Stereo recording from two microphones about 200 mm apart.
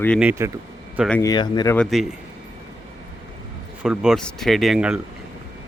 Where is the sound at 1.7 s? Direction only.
Centre (ahead or behind).